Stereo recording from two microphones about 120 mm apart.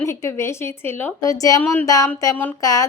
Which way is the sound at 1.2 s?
30° left (ahead or behind).